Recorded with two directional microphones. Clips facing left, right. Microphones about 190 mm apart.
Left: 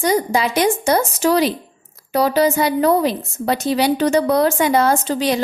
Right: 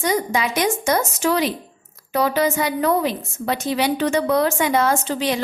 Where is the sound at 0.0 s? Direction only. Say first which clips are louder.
Left 4 dB; 35° left (ahead or behind).